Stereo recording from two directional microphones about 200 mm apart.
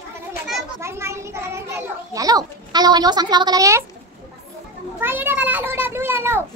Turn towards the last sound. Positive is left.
turn(degrees=-10)  # may be behind; listen again after turning